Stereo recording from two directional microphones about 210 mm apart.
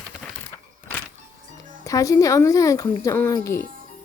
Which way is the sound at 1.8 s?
15° left (ahead or behind).